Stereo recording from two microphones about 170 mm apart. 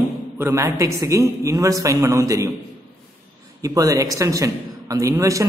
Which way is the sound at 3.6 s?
20° right (ahead or behind).